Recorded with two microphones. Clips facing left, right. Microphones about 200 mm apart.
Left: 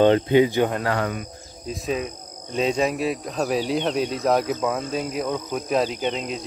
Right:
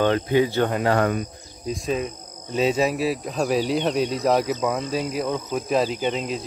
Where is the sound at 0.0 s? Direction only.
25° left (ahead or behind).